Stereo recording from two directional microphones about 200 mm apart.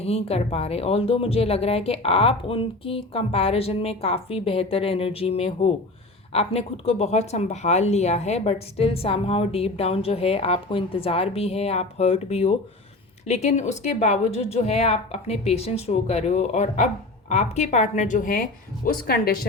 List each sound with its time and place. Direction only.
0.0 s a woman's voice: 30° left (ahead or behind); by 19.5 s 50° left (ahead or behind)